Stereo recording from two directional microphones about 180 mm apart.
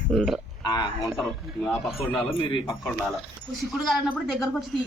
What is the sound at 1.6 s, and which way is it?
Speech, 5° left (ahead or behind).